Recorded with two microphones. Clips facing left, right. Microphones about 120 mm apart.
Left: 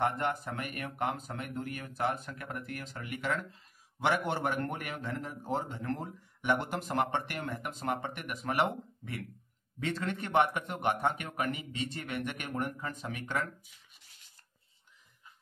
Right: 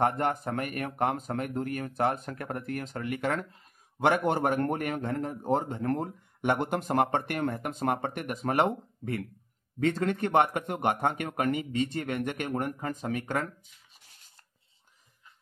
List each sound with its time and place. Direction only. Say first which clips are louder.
0.0 s speech: right 4 dB; 45° right (ahead or behind)